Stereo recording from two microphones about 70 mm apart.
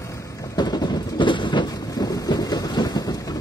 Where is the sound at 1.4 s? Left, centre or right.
Left.